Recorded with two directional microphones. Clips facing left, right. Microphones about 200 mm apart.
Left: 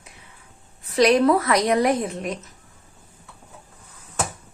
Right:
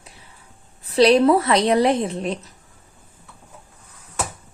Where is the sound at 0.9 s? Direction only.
30° right (ahead or behind).